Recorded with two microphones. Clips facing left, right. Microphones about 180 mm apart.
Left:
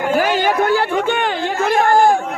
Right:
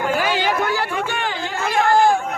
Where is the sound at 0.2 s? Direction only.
45° left (ahead or behind).